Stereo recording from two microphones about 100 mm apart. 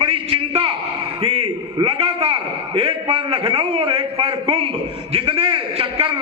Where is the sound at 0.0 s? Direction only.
65° right (ahead or behind).